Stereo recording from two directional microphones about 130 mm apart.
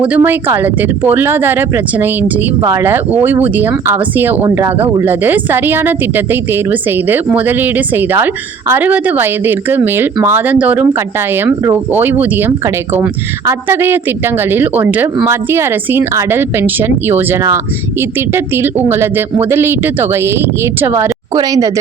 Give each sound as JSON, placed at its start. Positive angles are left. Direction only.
{"t": 0.2, "sound": "speech", "side_deg": -15}
{"t": 4.4, "sound": "speech", "side_deg": -25}
{"t": 4.8, "sound": "speech", "side_deg": -15}